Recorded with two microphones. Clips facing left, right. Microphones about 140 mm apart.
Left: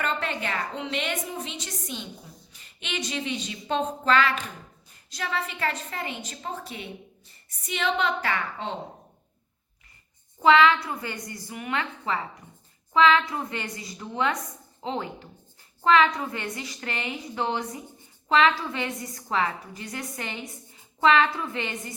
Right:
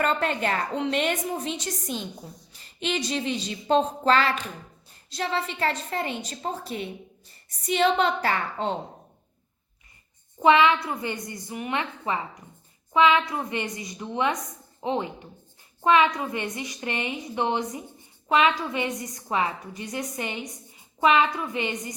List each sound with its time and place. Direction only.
0.0 s a woman's voice: 40° right (ahead or behind)
10.4 s a woman's voice: 20° right (ahead or behind)